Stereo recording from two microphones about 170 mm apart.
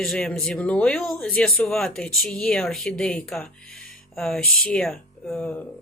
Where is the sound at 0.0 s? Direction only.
Centre (ahead or behind).